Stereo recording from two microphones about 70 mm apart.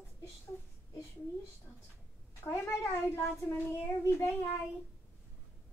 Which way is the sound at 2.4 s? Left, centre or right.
Left.